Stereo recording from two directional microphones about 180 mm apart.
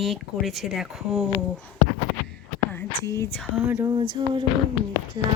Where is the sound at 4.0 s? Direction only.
25° right (ahead or behind).